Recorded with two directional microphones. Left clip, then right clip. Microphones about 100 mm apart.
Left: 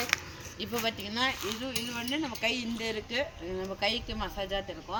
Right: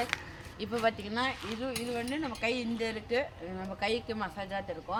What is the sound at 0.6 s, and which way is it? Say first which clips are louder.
Speech: right 2 dB; 30° right (ahead or behind).